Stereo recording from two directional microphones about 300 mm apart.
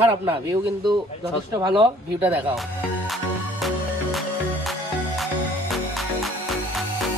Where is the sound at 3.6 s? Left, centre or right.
Centre.